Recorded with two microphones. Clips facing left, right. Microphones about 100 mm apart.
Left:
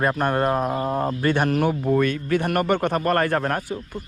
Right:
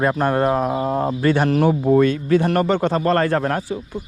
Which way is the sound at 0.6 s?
20° right (ahead or behind).